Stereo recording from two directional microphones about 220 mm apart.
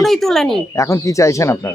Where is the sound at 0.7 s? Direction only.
15° left (ahead or behind).